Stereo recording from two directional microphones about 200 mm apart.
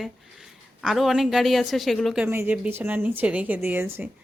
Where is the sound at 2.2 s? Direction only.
10° right (ahead or behind).